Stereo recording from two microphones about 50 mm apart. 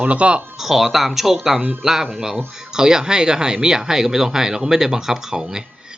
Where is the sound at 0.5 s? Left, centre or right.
Centre.